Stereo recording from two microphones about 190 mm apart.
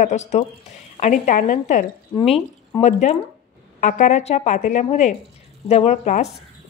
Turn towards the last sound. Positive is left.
turn(degrees=40)  # may be behind; listen again after turning